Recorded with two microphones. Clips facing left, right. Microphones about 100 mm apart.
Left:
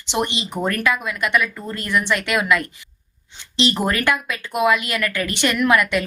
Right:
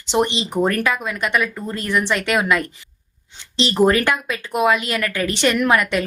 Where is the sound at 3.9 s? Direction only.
30° right (ahead or behind).